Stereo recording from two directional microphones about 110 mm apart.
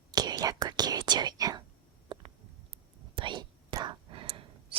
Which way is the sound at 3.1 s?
45° right (ahead or behind).